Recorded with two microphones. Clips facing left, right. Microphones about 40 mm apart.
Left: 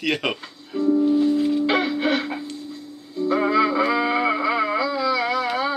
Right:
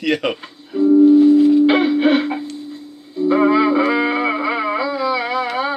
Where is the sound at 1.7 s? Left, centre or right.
Right.